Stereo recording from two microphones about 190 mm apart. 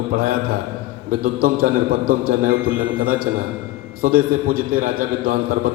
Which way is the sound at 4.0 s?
50° right (ahead or behind).